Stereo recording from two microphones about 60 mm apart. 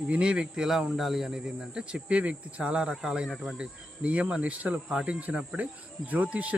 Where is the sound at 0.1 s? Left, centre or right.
Centre.